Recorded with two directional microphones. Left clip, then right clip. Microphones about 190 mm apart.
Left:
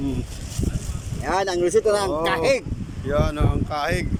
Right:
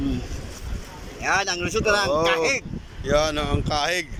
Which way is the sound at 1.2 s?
25° left (ahead or behind).